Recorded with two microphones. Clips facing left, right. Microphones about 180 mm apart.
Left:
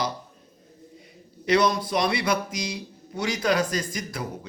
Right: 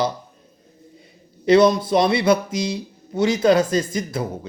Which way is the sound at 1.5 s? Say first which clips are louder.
Right 8 dB; 25° right (ahead or behind).